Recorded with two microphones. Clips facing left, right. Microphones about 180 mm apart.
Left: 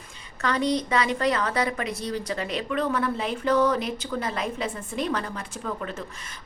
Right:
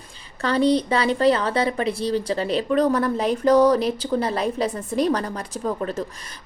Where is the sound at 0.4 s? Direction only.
30° right (ahead or behind).